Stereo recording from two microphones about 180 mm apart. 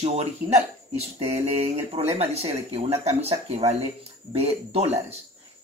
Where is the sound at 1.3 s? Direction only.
35° right (ahead or behind).